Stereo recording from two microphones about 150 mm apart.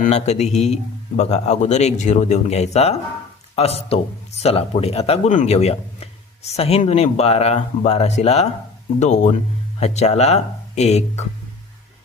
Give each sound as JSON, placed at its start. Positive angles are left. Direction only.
{"t": 0.0, "sound": "speech", "side_deg": 50}